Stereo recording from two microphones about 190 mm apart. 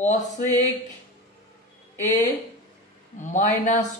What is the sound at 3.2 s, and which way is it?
Speech, 40° left (ahead or behind).